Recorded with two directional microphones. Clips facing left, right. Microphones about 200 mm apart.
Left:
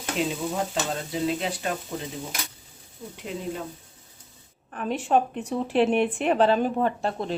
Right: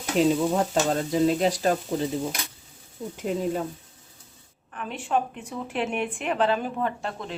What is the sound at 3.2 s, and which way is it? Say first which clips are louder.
Speech: right 6 dB; 45° right (ahead or behind).